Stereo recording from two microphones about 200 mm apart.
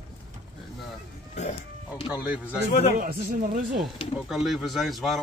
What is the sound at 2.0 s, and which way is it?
Speech, 5° right (ahead or behind).